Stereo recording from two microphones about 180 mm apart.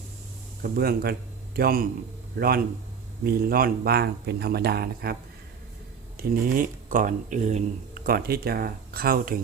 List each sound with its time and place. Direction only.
0.6 s speech: 55° right (ahead or behind)
3.2 s speech: 55° right (ahead or behind)
6.1 s speech: 55° right (ahead or behind)